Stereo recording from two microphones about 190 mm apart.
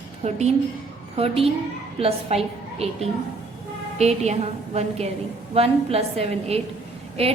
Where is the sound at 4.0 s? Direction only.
35° right (ahead or behind).